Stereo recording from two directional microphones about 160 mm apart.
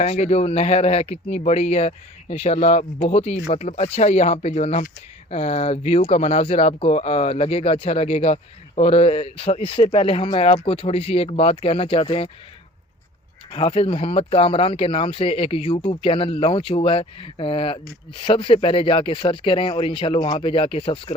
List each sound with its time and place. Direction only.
0.0 s speech: 40° left (ahead or behind)
13.5 s speech: 35° left (ahead or behind)